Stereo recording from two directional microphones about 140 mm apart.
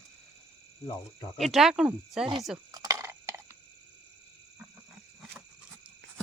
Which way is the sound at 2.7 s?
25° right (ahead or behind).